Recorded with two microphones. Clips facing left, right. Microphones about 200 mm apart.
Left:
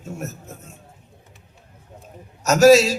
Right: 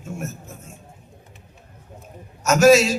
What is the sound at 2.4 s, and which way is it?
Speech, 35° left (ahead or behind).